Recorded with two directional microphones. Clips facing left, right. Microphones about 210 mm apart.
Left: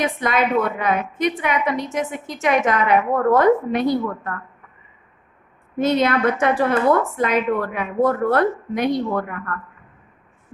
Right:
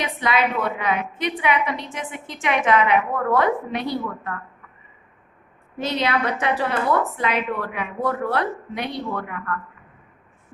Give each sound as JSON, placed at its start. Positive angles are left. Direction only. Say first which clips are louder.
{"t": 0.0, "sound": "a woman's voice", "louder": "left 2 dB", "side_deg": 50}
{"t": 5.7, "sound": "a woman's voice", "louder": "left 5 dB", "side_deg": 50}